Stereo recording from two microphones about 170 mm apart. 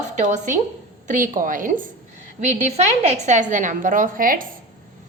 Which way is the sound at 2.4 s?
40° right (ahead or behind).